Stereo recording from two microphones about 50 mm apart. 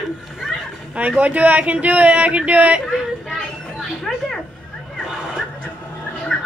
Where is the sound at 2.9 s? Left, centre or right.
Centre.